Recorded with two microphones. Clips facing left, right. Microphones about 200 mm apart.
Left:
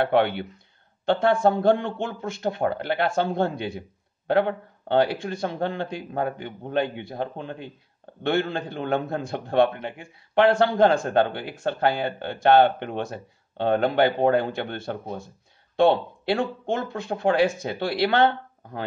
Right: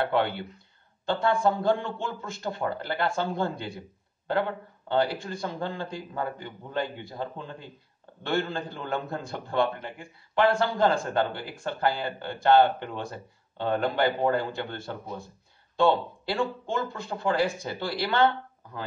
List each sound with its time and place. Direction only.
0.0 s a man's voice: 65° left (ahead or behind)